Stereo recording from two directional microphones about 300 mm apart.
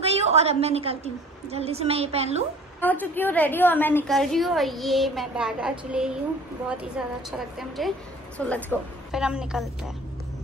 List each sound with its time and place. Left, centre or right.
0.0 s a woman's voice: right
2.8 s a woman's voice: centre